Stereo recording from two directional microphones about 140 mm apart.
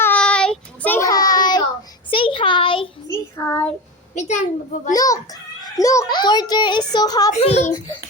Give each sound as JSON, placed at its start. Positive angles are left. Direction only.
{"t": 0.0, "sound": "child singing", "side_deg": 10}
{"t": 1.0, "sound": "child singing", "side_deg": 25}
{"t": 2.0, "sound": "a sound", "side_deg": 40}
{"t": 3.1, "sound": "child singing", "side_deg": 15}
{"t": 4.1, "sound": "a child's voice", "side_deg": 60}
{"t": 4.9, "sound": "a child's voice", "side_deg": 25}
{"t": 7.4, "sound": "a child's voice", "side_deg": 50}